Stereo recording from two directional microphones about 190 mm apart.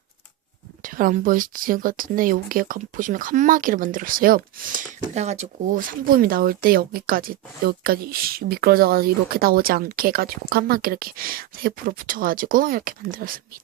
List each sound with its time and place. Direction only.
0.8 s speech: 45° right (ahead or behind)